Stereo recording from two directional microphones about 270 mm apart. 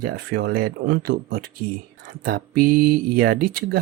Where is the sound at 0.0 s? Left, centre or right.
Right.